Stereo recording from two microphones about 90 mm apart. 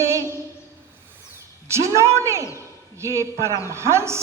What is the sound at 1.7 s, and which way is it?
A man's voice, 30° right (ahead or behind).